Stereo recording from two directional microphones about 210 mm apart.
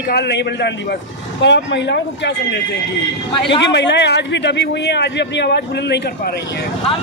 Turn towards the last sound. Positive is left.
turn(degrees=55)  # may be behind; listen again after turning